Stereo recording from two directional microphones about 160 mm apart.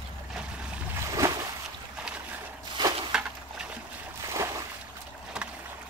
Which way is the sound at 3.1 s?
5° right (ahead or behind).